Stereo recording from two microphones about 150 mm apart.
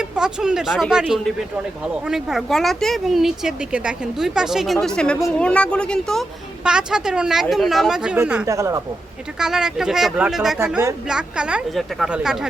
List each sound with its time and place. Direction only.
0.0 s a woman's voice: 5° right (ahead or behind)
8.4 s speech: 20° right (ahead or behind)
9.4 s speech: 5° right (ahead or behind)
10.6 s a woman's voice: 15° right (ahead or behind)